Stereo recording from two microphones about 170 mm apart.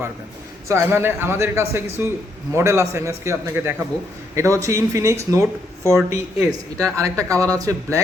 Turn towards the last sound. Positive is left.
turn(degrees=-20)  # may be behind; listen again after turning